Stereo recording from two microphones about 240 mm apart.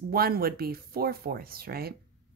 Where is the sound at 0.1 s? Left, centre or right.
Right.